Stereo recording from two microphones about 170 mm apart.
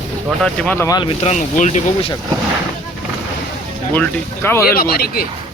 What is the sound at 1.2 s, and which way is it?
Speech, 45° left (ahead or behind).